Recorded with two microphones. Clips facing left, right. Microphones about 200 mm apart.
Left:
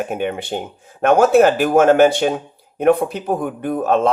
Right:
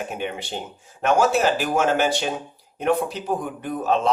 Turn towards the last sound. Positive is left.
turn(degrees=55)  # may be behind; listen again after turning